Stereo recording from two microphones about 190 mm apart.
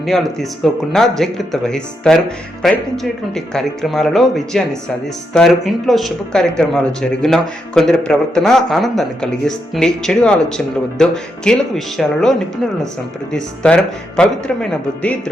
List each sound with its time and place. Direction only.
0.0 s speech: centre (ahead or behind)